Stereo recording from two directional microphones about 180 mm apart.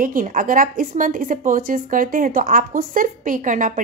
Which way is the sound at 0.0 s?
50° right (ahead or behind).